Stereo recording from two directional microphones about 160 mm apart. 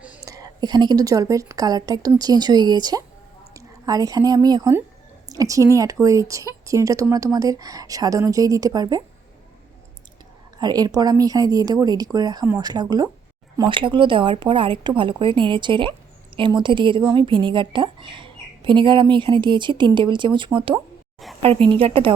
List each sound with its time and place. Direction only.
0.3 s a woman's voice: 25° right (ahead or behind)
10.6 s a woman's voice: 25° right (ahead or behind)